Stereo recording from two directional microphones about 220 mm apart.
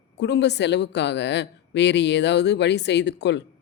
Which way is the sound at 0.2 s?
50° left (ahead or behind).